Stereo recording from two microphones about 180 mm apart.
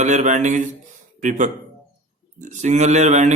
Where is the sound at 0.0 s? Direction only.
40° right (ahead or behind).